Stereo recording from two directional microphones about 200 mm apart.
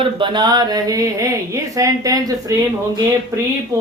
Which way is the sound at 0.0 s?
25° right (ahead or behind).